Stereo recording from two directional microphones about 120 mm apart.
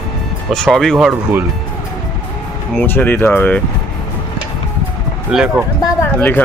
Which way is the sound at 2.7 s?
15° left (ahead or behind).